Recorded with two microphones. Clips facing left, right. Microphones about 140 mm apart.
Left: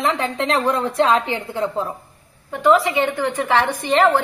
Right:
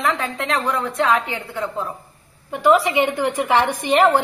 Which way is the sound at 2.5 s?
15° right (ahead or behind).